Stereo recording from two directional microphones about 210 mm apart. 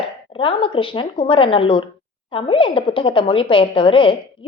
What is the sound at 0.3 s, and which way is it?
A woman's voice, 25° left (ahead or behind).